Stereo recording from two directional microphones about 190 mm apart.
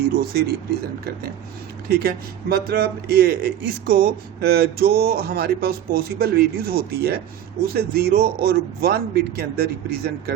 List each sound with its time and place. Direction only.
0.2 s a man's voice: 55° right (ahead or behind)
1.9 s a man's voice: 55° right (ahead or behind)